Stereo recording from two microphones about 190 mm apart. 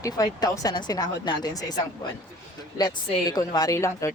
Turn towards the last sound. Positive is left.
turn(degrees=15)  # may be behind; listen again after turning